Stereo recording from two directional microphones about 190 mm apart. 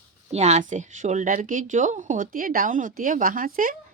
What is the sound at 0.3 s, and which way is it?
A woman's voice, 35° right (ahead or behind).